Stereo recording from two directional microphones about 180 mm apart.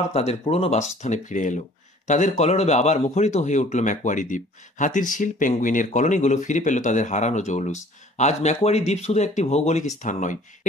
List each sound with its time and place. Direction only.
0.1 s a man's voice: 35° left (ahead or behind)